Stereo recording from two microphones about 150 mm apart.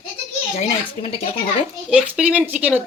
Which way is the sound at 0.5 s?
45° left (ahead or behind).